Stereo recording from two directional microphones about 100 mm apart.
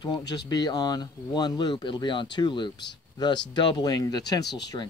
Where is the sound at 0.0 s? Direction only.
45° left (ahead or behind).